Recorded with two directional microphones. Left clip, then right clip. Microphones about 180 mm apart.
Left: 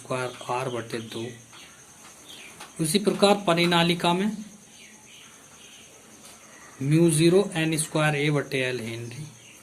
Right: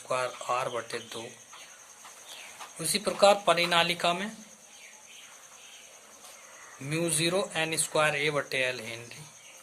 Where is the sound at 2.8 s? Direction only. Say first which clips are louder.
Left 1 dB; 15° right (ahead or behind).